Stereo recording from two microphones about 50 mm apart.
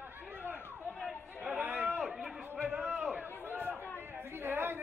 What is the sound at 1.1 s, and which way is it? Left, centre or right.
Chatter, left.